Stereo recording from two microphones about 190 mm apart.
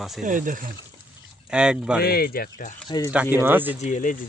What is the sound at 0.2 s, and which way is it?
Speech, 45° right (ahead or behind).